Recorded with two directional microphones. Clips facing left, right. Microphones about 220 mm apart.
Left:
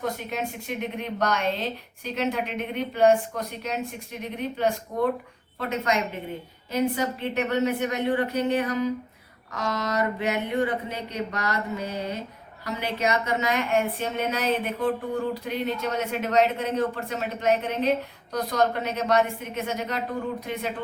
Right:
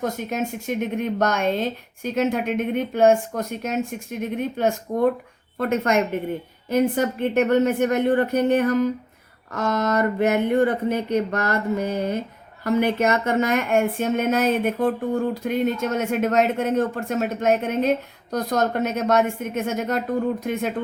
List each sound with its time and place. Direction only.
0.0 s speech: 45° right (ahead or behind)